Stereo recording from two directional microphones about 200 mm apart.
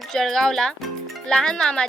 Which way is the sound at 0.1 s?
5° left (ahead or behind).